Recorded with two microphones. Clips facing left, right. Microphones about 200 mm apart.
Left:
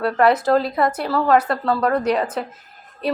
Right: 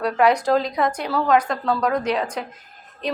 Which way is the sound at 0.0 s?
5° left (ahead or behind).